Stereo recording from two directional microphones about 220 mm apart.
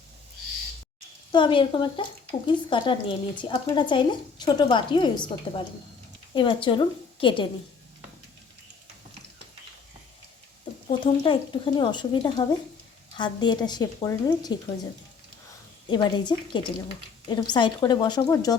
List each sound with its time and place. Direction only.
1.3 s speech: 20° left (ahead or behind)
10.8 s speech: 25° left (ahead or behind)
15.9 s speech: 20° left (ahead or behind)